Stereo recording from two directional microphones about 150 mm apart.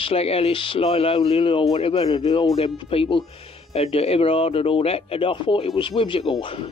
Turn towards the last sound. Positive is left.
turn(degrees=35)  # may be behind; listen again after turning